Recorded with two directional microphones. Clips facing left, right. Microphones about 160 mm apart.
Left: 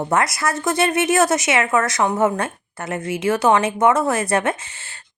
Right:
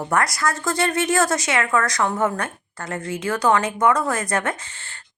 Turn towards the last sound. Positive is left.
turn(degrees=20)  # may be behind; listen again after turning